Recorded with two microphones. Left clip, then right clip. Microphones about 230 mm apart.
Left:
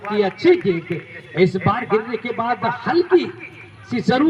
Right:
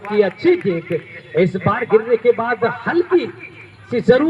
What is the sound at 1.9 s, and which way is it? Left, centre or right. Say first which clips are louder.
Speech: right 7 dB; left.